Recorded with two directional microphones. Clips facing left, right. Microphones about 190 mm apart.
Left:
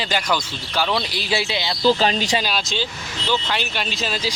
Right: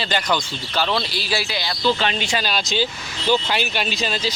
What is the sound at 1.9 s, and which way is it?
Speech, 35° left (ahead or behind).